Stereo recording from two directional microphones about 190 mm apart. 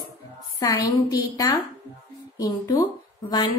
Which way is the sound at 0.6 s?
20° left (ahead or behind).